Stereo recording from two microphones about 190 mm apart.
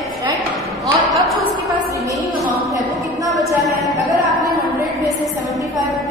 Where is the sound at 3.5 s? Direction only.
15° right (ahead or behind).